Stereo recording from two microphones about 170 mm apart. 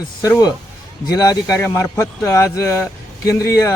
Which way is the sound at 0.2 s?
20° left (ahead or behind).